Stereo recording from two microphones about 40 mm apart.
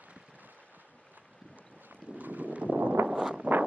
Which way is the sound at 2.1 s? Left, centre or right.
Right.